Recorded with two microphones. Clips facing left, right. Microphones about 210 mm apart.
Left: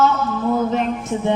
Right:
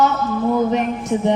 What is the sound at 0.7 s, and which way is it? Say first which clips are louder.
Music: right 2 dB; 15° right (ahead or behind).